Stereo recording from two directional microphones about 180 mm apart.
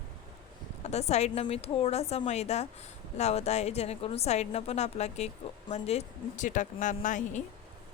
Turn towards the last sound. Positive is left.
turn(degrees=45)  # may be behind; listen again after turning